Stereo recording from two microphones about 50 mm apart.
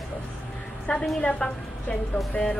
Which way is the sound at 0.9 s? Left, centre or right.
Left.